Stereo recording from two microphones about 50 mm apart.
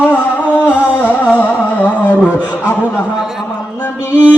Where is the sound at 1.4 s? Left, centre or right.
Left.